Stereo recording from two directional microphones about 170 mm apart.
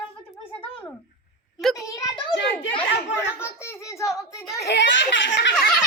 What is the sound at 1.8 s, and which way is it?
A child's voice, 20° left (ahead or behind).